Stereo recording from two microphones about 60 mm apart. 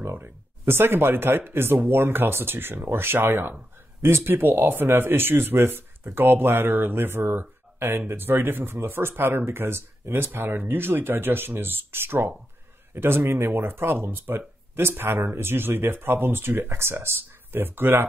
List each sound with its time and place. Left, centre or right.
0.0 s speech: right